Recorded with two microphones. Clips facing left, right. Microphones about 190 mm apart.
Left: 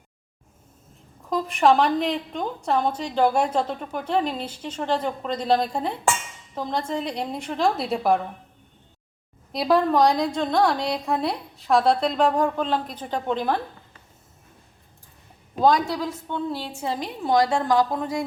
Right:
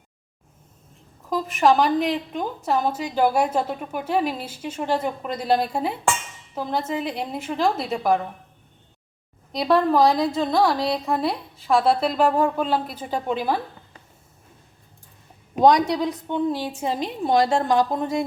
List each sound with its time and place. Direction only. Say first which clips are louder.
1.3 s a woman's voice: even; centre (ahead or behind)
9.5 s a woman's voice: right 1 dB; centre (ahead or behind)
15.5 s a woman's voice: right 3 dB; 20° right (ahead or behind)